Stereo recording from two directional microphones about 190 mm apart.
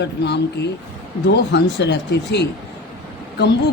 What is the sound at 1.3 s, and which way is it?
Speech, 65° left (ahead or behind).